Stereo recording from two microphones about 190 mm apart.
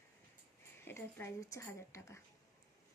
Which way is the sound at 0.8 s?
15° left (ahead or behind).